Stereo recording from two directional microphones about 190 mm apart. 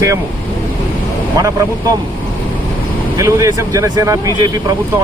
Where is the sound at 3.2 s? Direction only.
15° right (ahead or behind).